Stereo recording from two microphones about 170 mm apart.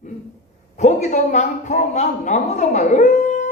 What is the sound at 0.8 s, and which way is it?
A woman's voice, 45° left (ahead or behind).